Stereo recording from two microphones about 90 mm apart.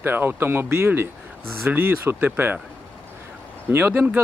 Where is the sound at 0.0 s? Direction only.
25° right (ahead or behind).